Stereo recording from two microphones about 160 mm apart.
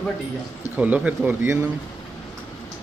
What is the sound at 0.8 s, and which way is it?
Speech, 10° right (ahead or behind).